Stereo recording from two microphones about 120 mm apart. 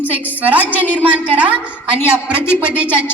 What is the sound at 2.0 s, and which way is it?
Speech, 20° left (ahead or behind).